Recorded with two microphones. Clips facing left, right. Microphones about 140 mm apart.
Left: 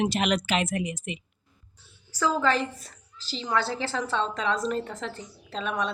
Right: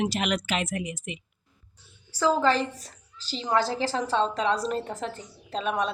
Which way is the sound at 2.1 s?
30° right (ahead or behind).